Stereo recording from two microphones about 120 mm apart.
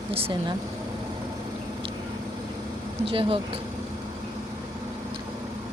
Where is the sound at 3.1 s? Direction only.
45° right (ahead or behind).